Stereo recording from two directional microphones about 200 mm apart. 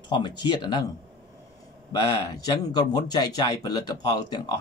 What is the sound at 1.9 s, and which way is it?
Speech, 20° left (ahead or behind).